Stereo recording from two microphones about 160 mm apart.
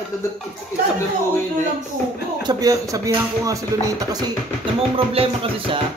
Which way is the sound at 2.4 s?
25° right (ahead or behind).